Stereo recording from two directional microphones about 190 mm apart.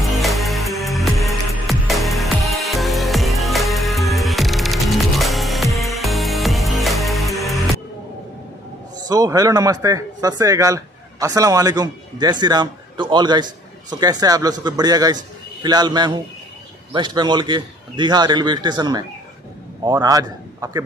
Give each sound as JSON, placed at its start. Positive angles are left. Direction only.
{"t": 0.0, "sound": "music", "side_deg": 0}
{"t": 9.0, "sound": "speech", "side_deg": -20}